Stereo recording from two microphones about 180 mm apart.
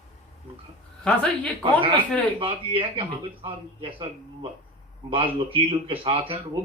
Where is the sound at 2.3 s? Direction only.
30° right (ahead or behind).